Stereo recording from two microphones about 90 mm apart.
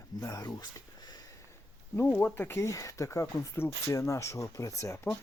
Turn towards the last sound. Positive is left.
turn(degrees=35)  # may be behind; listen again after turning